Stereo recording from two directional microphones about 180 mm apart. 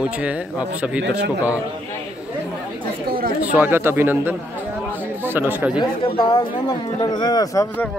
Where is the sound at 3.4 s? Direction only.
10° right (ahead or behind).